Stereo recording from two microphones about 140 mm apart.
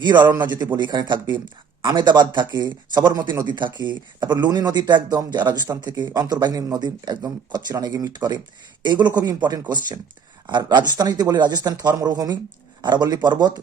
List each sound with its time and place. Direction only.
0.0 s a man's voice: 30° right (ahead or behind)